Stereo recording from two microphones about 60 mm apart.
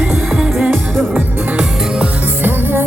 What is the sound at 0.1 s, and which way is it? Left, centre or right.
Music, centre.